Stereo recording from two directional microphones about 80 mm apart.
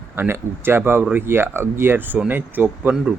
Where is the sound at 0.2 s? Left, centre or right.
Right.